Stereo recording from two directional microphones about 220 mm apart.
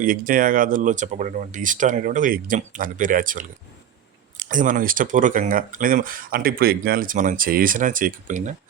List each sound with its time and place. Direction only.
0.0 s speech: 40° right (ahead or behind)